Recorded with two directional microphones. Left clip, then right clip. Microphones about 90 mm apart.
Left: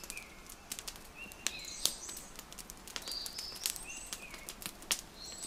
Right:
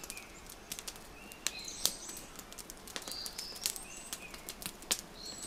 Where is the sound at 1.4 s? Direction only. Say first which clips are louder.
Even; centre (ahead or behind).